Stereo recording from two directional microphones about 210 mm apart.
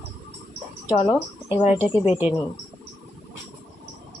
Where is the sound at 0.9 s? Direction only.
20° left (ahead or behind).